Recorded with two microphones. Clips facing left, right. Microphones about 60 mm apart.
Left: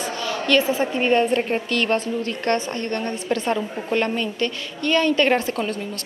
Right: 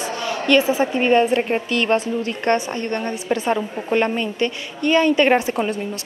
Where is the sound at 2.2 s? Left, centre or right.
Centre.